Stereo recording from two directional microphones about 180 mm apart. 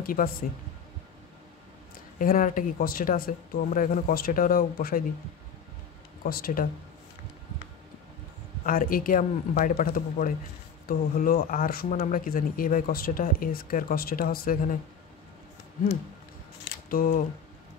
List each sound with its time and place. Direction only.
0.0 s speech: 50° left (ahead or behind)
2.1 s speech: 50° left (ahead or behind)
6.2 s speech: 55° left (ahead or behind)
8.6 s speech: 50° left (ahead or behind)
16.9 s speech: 50° left (ahead or behind)